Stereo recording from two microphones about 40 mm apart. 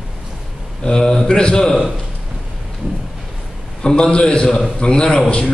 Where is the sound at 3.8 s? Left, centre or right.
Left.